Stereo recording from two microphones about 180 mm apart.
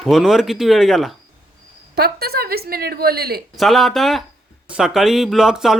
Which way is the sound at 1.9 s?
60° right (ahead or behind).